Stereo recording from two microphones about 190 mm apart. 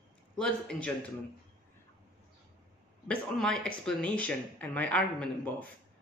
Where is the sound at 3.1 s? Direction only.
5° left (ahead or behind).